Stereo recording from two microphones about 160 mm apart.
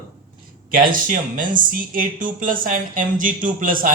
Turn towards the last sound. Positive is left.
turn(degrees=-60)  # may be behind; listen again after turning